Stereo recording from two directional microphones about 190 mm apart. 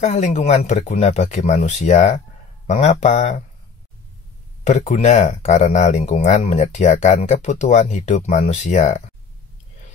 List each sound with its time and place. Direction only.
0.0 s speech: 40° left (ahead or behind)
4.6 s speech: 40° left (ahead or behind)